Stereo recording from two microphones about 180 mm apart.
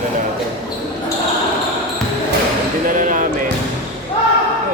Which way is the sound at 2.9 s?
50° right (ahead or behind).